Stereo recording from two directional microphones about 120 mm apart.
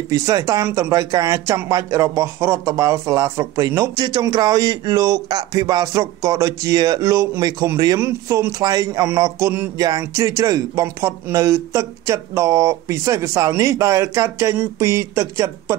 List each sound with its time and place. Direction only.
0.1 s speech: 30° right (ahead or behind)